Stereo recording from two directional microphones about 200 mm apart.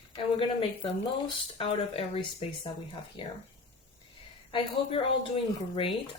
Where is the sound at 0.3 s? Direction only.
25° left (ahead or behind).